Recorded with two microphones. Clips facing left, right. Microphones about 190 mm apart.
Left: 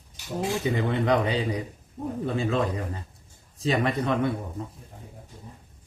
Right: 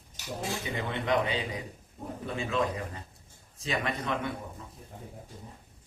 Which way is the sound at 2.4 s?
35° left (ahead or behind).